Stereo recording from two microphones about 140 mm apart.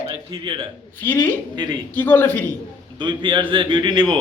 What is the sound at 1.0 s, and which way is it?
Speech, 15° left (ahead or behind).